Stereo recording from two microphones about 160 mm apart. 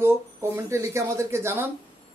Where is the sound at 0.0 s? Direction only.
15° right (ahead or behind).